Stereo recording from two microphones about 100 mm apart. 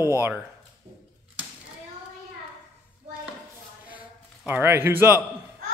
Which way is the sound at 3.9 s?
15° right (ahead or behind).